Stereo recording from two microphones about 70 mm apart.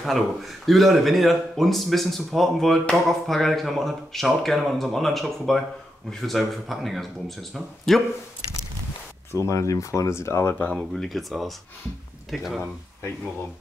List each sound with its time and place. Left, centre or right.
0.0 s a man's voice: centre
9.5 s speech: left
10.5 s speech: left
10.8 s a man's voice: centre